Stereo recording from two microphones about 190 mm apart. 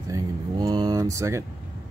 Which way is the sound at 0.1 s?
20° right (ahead or behind).